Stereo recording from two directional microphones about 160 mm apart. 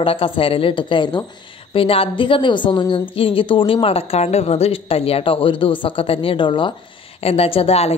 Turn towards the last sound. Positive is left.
turn(degrees=40)  # may be behind; listen again after turning